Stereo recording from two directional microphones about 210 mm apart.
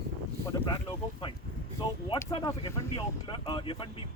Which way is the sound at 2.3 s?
15° left (ahead or behind).